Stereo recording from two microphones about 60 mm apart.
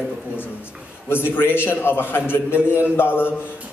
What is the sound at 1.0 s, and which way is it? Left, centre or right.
A man's voice, left.